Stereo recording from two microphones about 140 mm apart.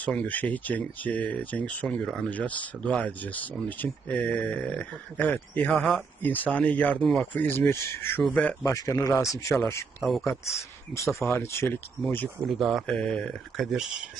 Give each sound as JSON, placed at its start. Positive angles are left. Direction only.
{"t": 0.0, "sound": "speech", "side_deg": 10}
{"t": 6.2, "sound": "speech", "side_deg": 10}
{"t": 8.6, "sound": "speech", "side_deg": 25}
{"t": 10.0, "sound": "speech", "side_deg": 0}
{"t": 10.9, "sound": "speech", "side_deg": 20}
{"t": 12.5, "sound": "speech", "side_deg": 0}